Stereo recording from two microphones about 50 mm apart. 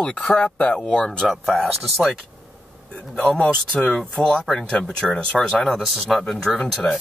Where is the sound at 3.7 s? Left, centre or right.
Centre.